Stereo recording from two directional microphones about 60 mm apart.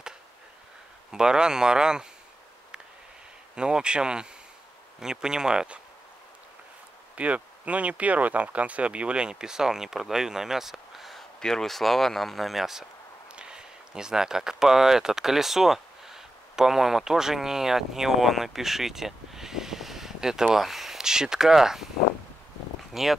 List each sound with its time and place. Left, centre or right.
1.1 s speech: centre
3.5 s speech: centre
7.2 s speech: right; by 21.8 s centre
22.9 s speech: centre